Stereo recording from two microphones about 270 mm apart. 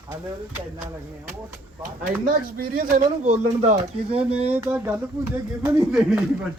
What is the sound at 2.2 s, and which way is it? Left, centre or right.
Speech, right.